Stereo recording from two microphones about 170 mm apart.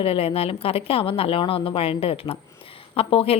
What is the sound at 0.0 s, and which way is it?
A woman's voice, 35° left (ahead or behind).